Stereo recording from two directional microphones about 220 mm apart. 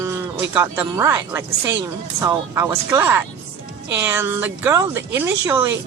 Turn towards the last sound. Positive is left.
turn(degrees=-10)  # may be behind; listen again after turning